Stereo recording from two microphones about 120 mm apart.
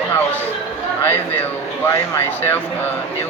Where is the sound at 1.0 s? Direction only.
15° left (ahead or behind).